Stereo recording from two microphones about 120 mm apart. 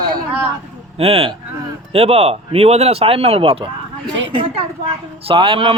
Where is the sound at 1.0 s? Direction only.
55° right (ahead or behind).